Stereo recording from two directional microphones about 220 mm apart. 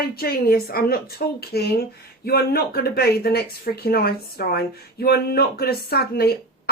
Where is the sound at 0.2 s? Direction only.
45° left (ahead or behind).